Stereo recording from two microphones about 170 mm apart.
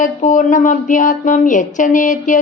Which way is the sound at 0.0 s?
50° left (ahead or behind).